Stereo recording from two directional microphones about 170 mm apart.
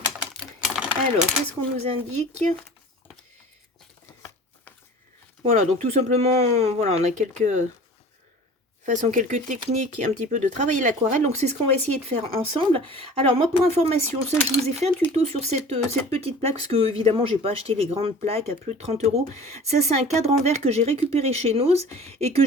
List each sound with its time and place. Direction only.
0.3 s typing: 5° right (ahead or behind)
1.7 s speech: 40° right (ahead or behind)
5.4 s speech: 40° right (ahead or behind)
8.9 s speech: 45° right (ahead or behind)